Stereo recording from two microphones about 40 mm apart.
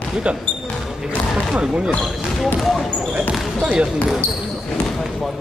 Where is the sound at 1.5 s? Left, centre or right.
Right.